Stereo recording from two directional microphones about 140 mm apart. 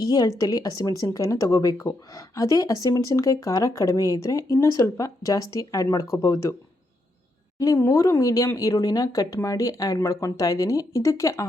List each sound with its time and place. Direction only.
0.0 s speech: 25° left (ahead or behind)
7.6 s speech: 20° left (ahead or behind)